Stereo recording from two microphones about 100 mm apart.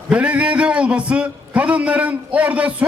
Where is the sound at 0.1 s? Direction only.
10° right (ahead or behind).